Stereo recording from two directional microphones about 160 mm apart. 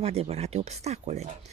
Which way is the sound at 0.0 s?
40° right (ahead or behind).